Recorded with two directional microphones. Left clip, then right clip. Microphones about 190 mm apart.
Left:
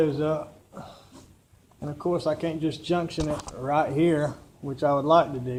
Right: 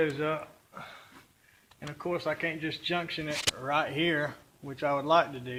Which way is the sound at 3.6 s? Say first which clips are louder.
Left 9 dB; 15° right (ahead or behind).